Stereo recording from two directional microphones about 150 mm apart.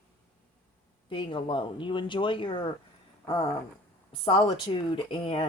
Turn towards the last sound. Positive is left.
turn(degrees=35)  # may be behind; listen again after turning